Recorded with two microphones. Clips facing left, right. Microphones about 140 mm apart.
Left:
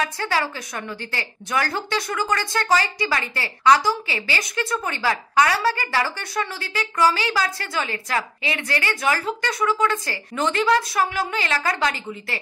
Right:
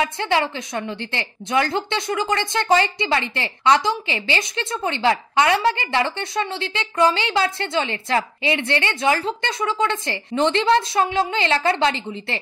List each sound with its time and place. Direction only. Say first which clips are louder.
0.0 s a woman's voice: right 3 dB; 20° right (ahead or behind)